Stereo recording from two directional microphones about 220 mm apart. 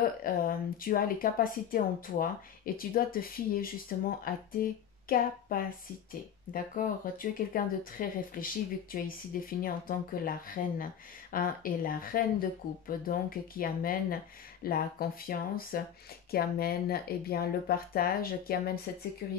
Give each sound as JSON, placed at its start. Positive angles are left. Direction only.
{"t": 0.0, "sound": "speech", "side_deg": 40}